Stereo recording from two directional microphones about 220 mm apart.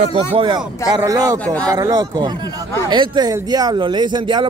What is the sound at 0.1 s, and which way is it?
Speech, 25° right (ahead or behind).